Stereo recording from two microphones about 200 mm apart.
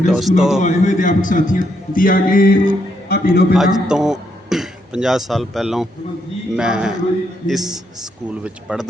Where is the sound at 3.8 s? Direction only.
5° right (ahead or behind).